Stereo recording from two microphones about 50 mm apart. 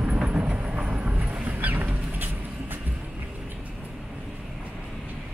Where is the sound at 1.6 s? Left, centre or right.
Right.